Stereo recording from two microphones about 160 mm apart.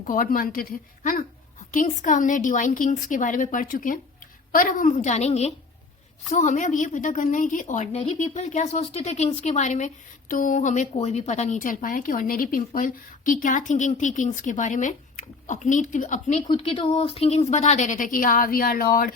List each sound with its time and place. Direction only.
0.0 s a woman's voice: 60° left (ahead or behind)
1.7 s a woman's voice: 55° left (ahead or behind)
16.5 s speech: 35° left (ahead or behind); by 19.1 s 65° left (ahead or behind)